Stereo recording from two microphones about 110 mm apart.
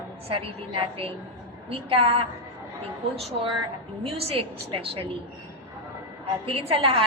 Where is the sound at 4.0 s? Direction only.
65° right (ahead or behind).